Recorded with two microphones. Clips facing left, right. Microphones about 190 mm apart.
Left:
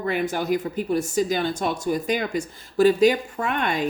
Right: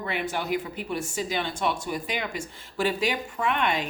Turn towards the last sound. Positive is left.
turn(degrees=45)  # may be behind; listen again after turning